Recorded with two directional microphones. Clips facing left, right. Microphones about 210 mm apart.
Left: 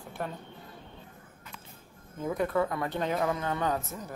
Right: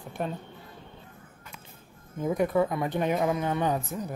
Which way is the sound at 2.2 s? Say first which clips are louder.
Right 4 dB; 15° right (ahead or behind).